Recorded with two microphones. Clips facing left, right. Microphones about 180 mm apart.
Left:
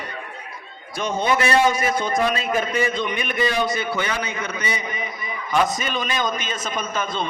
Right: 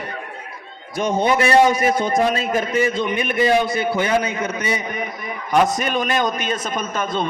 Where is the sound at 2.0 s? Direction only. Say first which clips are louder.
Right 3 dB; 45° right (ahead or behind); by 5.3 s 65° right (ahead or behind).